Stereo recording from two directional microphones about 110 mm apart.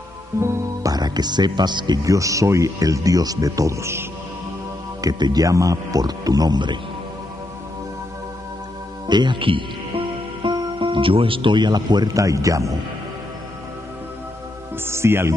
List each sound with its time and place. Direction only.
0.4 s speech: 35° right (ahead or behind)
5.0 s speech: 35° right (ahead or behind)
9.0 s speech: 45° right (ahead or behind)
14.9 s music: 20° right (ahead or behind)